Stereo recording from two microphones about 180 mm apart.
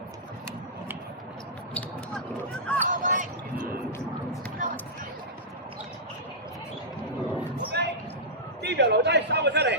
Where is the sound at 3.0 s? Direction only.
45° right (ahead or behind).